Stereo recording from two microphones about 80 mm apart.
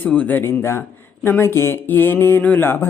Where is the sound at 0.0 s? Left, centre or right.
Centre.